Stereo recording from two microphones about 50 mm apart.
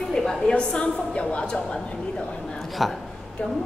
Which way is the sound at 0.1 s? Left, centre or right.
Centre.